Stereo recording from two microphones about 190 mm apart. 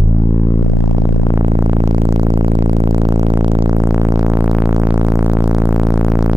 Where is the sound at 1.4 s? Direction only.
30° right (ahead or behind).